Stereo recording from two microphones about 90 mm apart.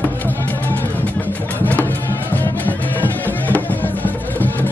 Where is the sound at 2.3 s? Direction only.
20° left (ahead or behind).